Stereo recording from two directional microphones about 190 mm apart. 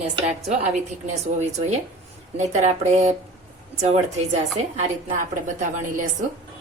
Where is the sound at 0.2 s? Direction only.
35° right (ahead or behind).